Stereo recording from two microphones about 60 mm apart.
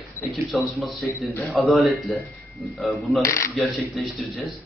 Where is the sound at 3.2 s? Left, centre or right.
Left.